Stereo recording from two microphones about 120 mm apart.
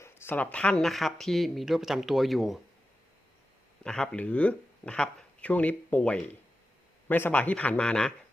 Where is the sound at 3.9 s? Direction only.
5° left (ahead or behind).